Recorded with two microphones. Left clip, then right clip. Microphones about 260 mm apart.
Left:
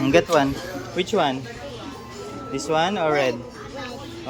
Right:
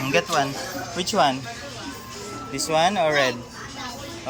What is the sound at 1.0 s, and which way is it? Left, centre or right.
Speech, centre.